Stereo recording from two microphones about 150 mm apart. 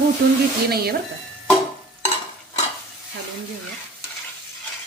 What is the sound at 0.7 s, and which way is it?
Speech, 90° right.